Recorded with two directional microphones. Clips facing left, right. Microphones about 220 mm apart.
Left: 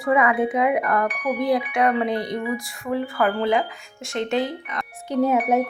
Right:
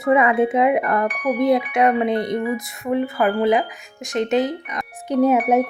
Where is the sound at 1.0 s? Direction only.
45° right (ahead or behind).